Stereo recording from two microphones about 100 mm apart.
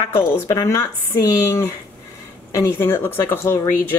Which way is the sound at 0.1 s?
25° left (ahead or behind).